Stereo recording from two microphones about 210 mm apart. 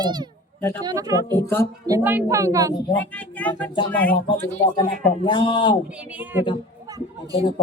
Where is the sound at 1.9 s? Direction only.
10° right (ahead or behind).